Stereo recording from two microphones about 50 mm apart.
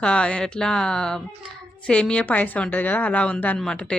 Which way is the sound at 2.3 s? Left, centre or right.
Left.